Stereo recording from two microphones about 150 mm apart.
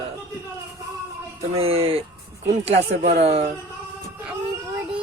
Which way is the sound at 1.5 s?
40° right (ahead or behind).